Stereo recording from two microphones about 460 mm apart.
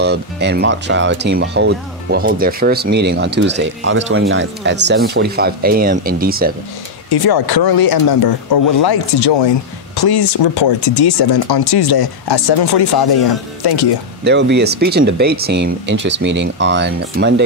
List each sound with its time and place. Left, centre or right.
0.0 s speech: right
7.1 s speech: left
14.2 s speech: right